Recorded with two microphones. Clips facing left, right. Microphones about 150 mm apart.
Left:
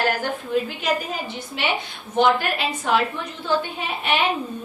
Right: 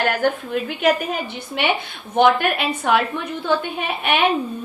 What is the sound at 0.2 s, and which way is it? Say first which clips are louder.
Speech: right 7 dB; 60° right (ahead or behind).